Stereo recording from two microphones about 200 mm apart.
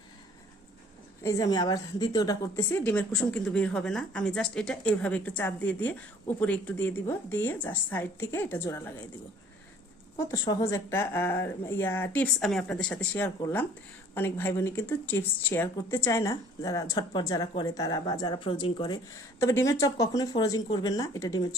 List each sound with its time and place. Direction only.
1.2 s a woman's voice: 15° left (ahead or behind)
10.3 s a woman's voice: 20° left (ahead or behind)